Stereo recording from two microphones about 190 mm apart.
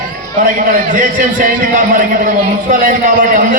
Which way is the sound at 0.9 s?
45° right (ahead or behind).